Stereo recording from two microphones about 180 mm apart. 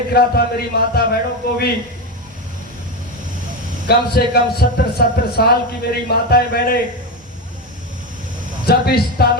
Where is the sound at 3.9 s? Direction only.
60° left (ahead or behind).